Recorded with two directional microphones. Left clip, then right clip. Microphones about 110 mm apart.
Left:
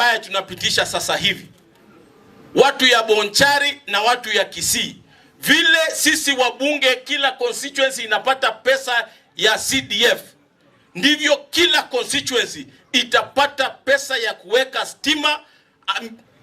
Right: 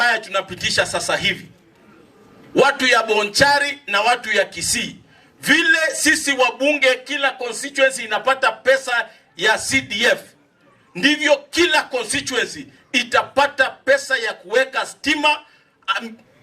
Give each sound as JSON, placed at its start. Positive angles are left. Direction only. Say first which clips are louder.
{"t": 0.0, "sound": "speech", "louder": "even", "side_deg": 15}
{"t": 2.6, "sound": "speech", "louder": "left 1 dB", "side_deg": 15}